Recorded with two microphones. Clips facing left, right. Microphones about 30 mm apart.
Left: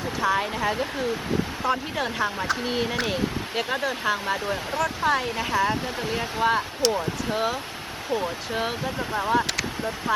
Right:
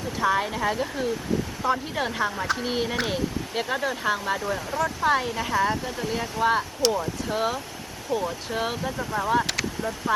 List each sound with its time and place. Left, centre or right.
0.2 s speech: centre
4.4 s speech: left
4.8 s speech: centre
5.7 s speech: left
6.5 s speech: centre
6.9 s speech: centre
10.1 s speech: left